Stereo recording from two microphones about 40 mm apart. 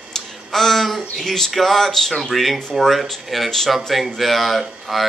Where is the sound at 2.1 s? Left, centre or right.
Centre.